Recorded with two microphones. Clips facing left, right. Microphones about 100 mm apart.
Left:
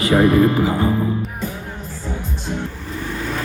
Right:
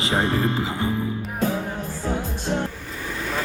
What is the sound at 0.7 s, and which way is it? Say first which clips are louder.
Music: left 6 dB; 35° left (ahead or behind).